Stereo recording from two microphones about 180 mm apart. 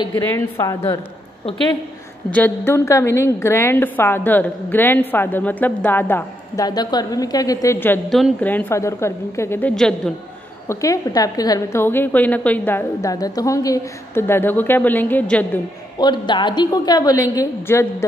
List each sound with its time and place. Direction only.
0.1 s a woman's voice: 15° left (ahead or behind)
2.3 s a woman's voice: 10° left (ahead or behind)
10.7 s a woman's voice: 20° left (ahead or behind)
16.0 s a woman's voice: 25° left (ahead or behind)